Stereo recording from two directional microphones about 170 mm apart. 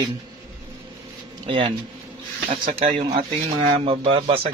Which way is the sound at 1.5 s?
30° right (ahead or behind).